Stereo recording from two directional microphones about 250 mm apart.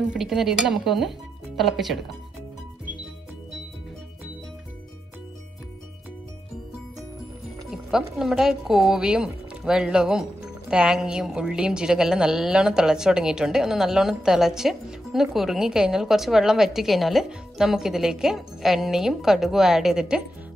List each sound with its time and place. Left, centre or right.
0.1 s a woman's voice: centre
7.7 s a woman's voice: centre